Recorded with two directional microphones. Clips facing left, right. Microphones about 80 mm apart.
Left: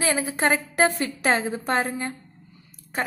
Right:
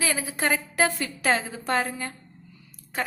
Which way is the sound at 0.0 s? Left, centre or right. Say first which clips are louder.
Left 4 dB; left.